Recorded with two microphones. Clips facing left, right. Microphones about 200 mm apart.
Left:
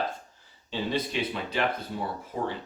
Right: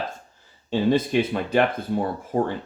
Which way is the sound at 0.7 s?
50° right (ahead or behind).